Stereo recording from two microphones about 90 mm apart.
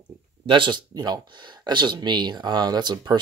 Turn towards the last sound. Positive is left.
turn(degrees=-55)  # may be behind; listen again after turning